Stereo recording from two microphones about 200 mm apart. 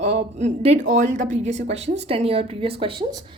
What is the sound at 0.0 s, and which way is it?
Speech, 30° right (ahead or behind).